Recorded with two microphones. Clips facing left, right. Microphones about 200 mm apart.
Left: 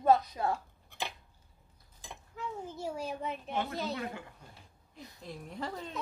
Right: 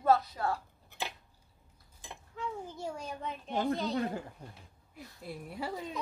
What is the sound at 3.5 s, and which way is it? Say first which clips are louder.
Speech: right 6 dB; 35° right (ahead or behind).